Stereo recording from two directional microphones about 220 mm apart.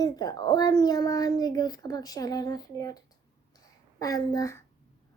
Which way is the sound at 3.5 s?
15° left (ahead or behind).